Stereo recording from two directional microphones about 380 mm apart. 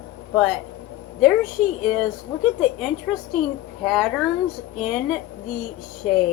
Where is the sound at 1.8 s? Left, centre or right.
Centre.